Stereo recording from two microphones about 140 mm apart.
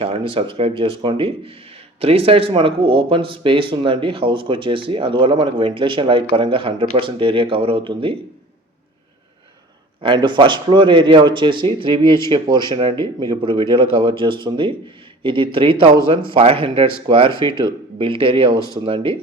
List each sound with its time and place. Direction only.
0.0 s speech: 40° right (ahead or behind)
10.0 s speech: 35° right (ahead or behind)